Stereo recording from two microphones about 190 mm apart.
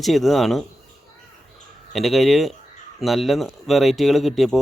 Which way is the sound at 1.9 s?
Centre (ahead or behind).